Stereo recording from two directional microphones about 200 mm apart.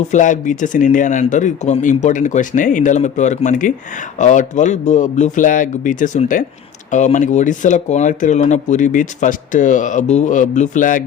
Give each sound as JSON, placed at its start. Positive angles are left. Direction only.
{"t": 0.1, "sound": "speech", "side_deg": 40}